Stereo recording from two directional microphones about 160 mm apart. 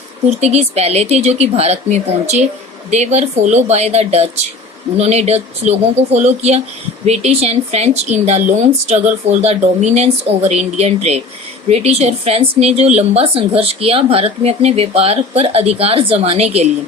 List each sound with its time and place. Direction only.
0.3 s speech: 45° right (ahead or behind)